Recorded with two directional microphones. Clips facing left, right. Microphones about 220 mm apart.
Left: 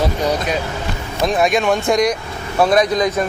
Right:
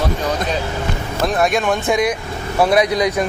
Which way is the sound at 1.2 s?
Centre (ahead or behind).